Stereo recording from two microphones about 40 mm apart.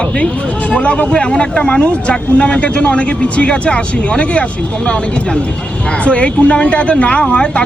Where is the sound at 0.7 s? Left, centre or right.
Left.